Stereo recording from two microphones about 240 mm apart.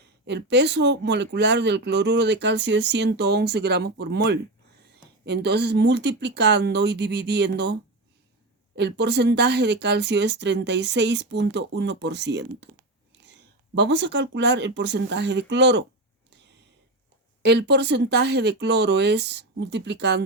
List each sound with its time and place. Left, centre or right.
0.3 s speech: right
13.7 s speech: right
17.4 s speech: right